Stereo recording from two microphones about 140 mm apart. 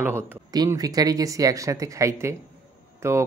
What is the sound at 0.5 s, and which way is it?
Speech, 25° right (ahead or behind).